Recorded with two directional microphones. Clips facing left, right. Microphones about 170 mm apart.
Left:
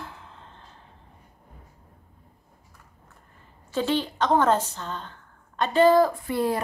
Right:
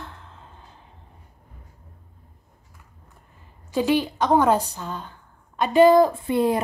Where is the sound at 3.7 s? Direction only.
10° right (ahead or behind).